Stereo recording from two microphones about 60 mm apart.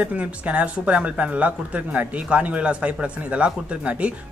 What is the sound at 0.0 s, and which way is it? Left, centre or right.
Speech, right.